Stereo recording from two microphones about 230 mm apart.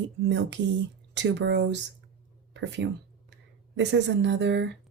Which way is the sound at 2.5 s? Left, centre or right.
Right.